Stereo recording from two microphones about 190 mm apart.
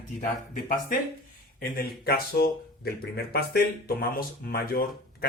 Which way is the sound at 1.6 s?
50° left (ahead or behind).